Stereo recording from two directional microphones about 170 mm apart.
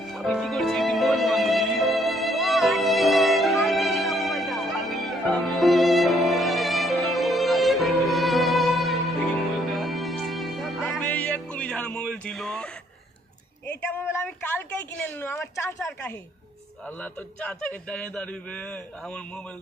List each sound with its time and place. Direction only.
0.1 s music: centre (ahead or behind)
13.7 s a sound: 10° left (ahead or behind)
16.8 s speech: 10° left (ahead or behind)